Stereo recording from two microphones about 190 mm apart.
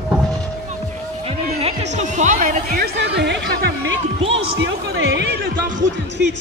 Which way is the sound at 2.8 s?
60° right (ahead or behind).